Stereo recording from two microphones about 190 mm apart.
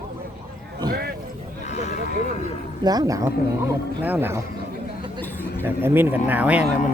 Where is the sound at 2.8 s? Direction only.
20° right (ahead or behind).